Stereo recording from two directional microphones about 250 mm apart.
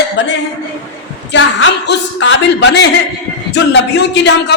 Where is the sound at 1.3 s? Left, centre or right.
Left.